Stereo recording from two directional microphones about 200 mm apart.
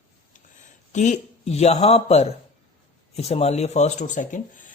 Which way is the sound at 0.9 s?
35° left (ahead or behind).